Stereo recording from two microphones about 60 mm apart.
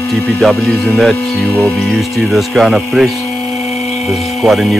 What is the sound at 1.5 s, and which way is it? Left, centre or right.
Speech, left.